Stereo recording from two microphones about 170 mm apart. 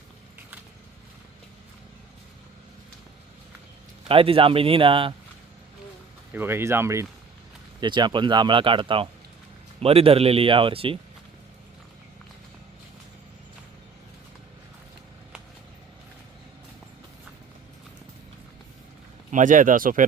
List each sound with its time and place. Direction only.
4.1 s speech: 30° right (ahead or behind)
6.3 s speech: 15° right (ahead or behind)
7.8 s speech: 25° right (ahead or behind)
19.3 s speech: 50° right (ahead or behind)